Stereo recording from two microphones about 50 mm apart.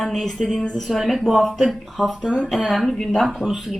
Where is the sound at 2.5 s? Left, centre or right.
Centre.